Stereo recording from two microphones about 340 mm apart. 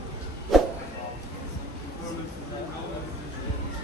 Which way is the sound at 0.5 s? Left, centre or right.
Centre.